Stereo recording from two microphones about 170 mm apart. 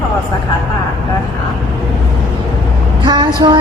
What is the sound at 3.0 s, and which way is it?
Female singing, 25° right (ahead or behind).